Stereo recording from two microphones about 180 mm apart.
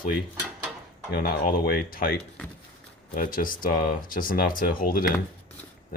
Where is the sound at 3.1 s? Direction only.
50° left (ahead or behind).